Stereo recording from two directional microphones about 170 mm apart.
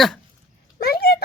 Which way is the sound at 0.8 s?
65° left (ahead or behind).